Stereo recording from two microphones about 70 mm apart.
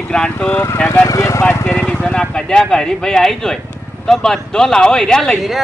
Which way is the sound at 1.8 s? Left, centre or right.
Centre.